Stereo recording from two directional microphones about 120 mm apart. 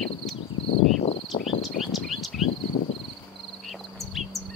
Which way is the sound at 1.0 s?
60° left (ahead or behind).